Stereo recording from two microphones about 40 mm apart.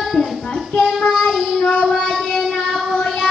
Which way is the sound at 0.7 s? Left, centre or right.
Centre.